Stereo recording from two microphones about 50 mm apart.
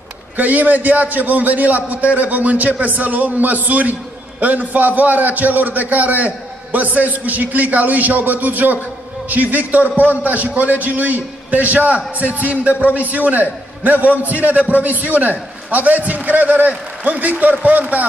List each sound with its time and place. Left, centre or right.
0.4 s a man's voice: right